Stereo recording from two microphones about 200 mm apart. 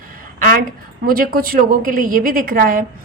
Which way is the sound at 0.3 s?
45° right (ahead or behind).